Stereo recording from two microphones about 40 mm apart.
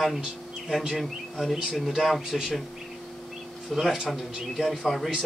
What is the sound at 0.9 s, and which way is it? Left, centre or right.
Speech, centre.